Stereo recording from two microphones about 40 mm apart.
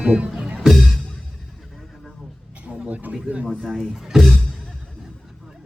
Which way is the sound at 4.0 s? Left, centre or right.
Centre.